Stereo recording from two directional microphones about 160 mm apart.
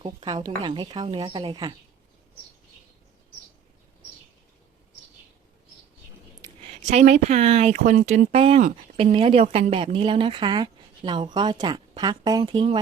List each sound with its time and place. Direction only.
0.0 s speech: 30° right (ahead or behind)
6.8 s speech: 45° right (ahead or behind)